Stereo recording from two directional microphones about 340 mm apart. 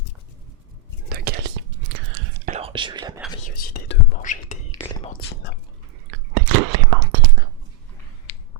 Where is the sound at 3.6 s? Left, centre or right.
Left.